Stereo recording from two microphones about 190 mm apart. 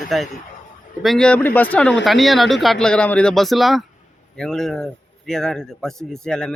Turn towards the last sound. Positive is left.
turn(degrees=5)  # may be behind; listen again after turning